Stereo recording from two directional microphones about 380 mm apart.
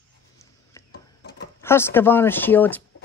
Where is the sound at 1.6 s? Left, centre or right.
Centre.